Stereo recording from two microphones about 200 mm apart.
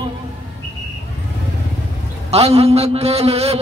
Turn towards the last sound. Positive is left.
turn(degrees=-30)  # may be behind; listen again after turning